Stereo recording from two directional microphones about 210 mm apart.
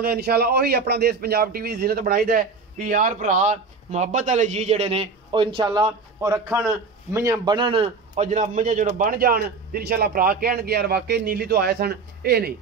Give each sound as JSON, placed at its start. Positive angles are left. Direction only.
{"t": 0.0, "sound": "a man's voice", "side_deg": -45}